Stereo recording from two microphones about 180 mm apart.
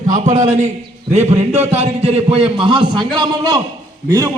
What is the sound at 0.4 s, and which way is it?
A man's voice, 40° right (ahead or behind).